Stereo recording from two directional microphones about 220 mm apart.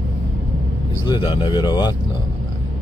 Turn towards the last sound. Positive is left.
turn(degrees=20)  # may be behind; listen again after turning